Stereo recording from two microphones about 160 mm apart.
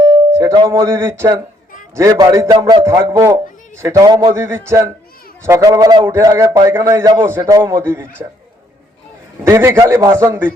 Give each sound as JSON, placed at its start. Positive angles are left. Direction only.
{"t": 0.0, "sound": "music", "side_deg": -20}
{"t": 0.7, "sound": "a man's voice", "side_deg": -15}
{"t": 9.4, "sound": "a man's voice", "side_deg": -15}